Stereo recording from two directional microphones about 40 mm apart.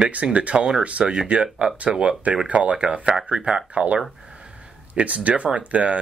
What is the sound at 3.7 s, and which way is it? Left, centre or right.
Speech, right.